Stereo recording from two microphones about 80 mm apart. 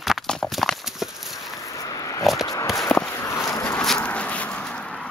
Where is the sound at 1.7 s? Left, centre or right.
Left.